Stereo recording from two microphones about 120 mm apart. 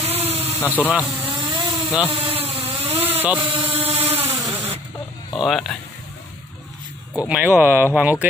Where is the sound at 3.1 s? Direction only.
15° right (ahead or behind).